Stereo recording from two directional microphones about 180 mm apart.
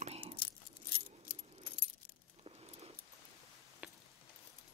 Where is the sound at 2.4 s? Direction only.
35° right (ahead or behind).